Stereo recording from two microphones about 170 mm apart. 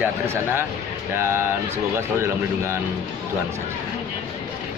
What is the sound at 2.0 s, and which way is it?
Speech, 15° right (ahead or behind).